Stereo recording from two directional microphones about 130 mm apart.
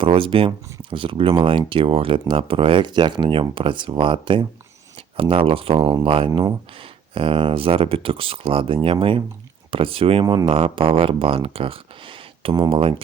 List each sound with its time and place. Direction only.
0.0 s speech: 45° right (ahead or behind)